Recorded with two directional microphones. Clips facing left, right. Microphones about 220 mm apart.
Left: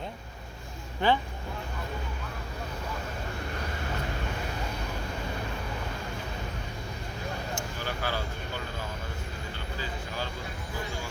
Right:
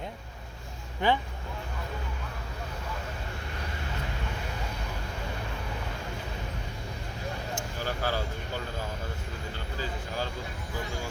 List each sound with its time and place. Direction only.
1.0 s speech: 15° right (ahead or behind)
7.9 s speech: 40° right (ahead or behind)